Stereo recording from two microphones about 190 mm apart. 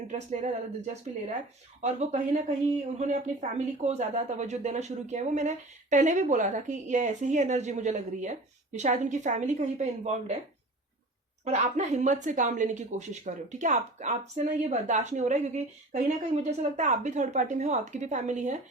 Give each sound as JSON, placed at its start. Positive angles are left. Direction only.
{"t": 0.1, "sound": "a woman's voice", "side_deg": -40}
{"t": 11.4, "sound": "a woman's voice", "side_deg": -35}